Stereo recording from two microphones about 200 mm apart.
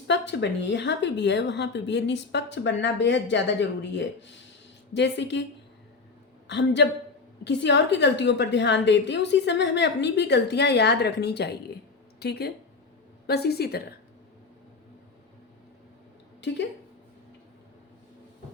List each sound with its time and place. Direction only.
0.1 s a woman's voice: 60° left (ahead or behind)
6.5 s a woman's voice: 60° left (ahead or behind)